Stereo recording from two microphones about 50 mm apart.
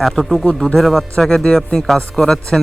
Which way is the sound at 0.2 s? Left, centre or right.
Left.